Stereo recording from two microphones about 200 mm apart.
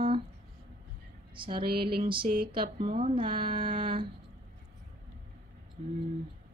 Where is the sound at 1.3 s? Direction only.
25° right (ahead or behind).